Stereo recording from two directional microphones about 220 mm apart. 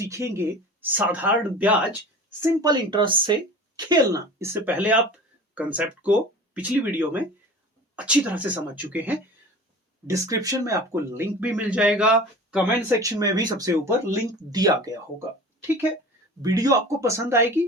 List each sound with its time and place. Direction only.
0.0 s speech: 15° right (ahead or behind)
2.4 s speech: 15° right (ahead or behind)
16.4 s speech: 15° right (ahead or behind)